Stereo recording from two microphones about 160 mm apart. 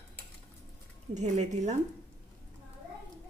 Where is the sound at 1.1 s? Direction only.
45° right (ahead or behind).